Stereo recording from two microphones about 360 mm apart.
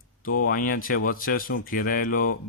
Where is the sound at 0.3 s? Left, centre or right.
Left.